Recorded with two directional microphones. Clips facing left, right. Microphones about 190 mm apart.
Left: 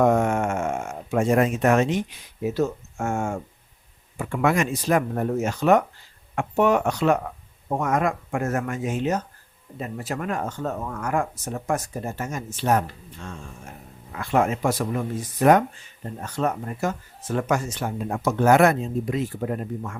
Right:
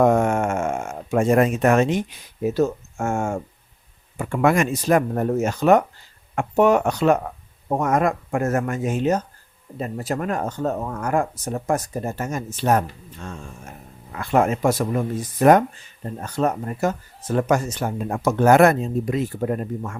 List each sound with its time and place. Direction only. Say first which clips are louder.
0.0 s a sound: right 2 dB; 45° right (ahead or behind)
2.4 s speech: right 3 dB; 45° right (ahead or behind)
14.2 s speech: right 3 dB; 45° right (ahead or behind)